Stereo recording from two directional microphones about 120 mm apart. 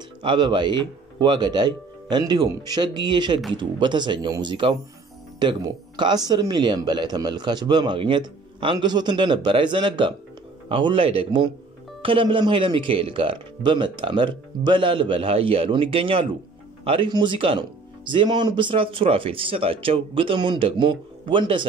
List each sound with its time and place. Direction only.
0.2 s speech: 40° right (ahead or behind)